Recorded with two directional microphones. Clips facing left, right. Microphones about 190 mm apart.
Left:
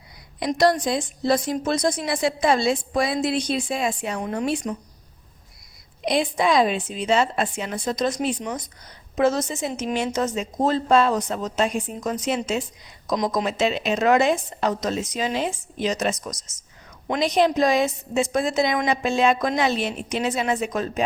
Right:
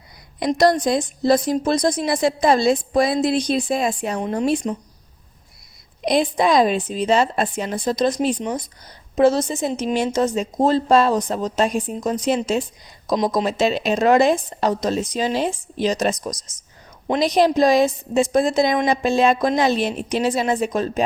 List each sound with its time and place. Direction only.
0.3 s a woman's voice: 45° right (ahead or behind)
4.2 s speech: 25° right (ahead or behind)
6.1 s a woman's voice: 40° right (ahead or behind)
8.4 s a woman's voice: 25° right (ahead or behind)